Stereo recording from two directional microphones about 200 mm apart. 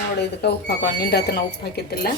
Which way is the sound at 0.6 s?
55° left (ahead or behind).